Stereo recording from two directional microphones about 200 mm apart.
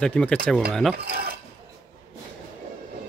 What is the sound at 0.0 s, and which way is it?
Speech, 5° left (ahead or behind).